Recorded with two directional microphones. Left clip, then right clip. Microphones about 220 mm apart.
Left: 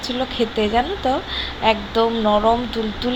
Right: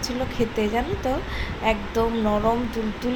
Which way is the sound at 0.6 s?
20° left (ahead or behind).